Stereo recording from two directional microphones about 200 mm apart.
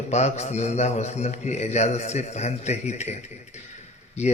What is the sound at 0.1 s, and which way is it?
A man's voice, 35° left (ahead or behind).